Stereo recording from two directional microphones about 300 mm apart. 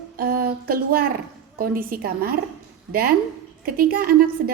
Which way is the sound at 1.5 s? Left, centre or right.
Right.